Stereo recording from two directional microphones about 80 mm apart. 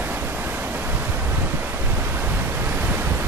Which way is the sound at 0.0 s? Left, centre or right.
Right.